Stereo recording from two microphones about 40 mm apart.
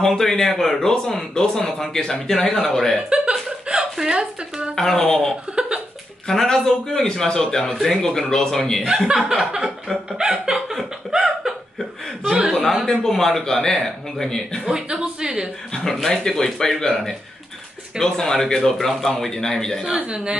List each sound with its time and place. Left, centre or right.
0.0 s speech: centre
3.1 s a sound: right
4.1 s speech: right
4.7 s speech: centre
8.8 s speech: centre
11.1 s a sound: centre
12.3 s chuckle: right
12.9 s speech: centre
14.7 s speech: right
15.7 s speech: centre
20.0 s speech: right